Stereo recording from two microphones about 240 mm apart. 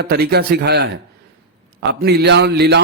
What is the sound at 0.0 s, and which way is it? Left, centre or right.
A man's voice, right.